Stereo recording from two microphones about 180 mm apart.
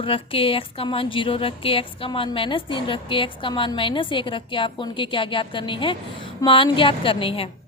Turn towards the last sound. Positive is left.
turn(degrees=30)  # may be behind; listen again after turning